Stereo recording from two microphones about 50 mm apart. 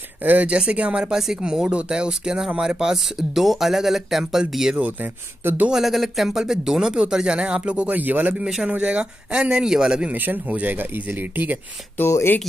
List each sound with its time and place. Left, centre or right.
0.2 s speech: right
0.5 s speech: right
1.1 s speech: centre
1.4 s speech: centre
7.3 s speech: right
8.6 s speech: right
10.1 s speech: right